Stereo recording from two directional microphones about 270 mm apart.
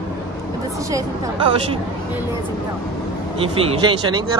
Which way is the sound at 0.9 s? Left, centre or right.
Centre.